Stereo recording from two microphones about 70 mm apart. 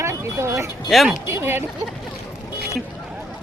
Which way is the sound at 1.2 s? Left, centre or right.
Right.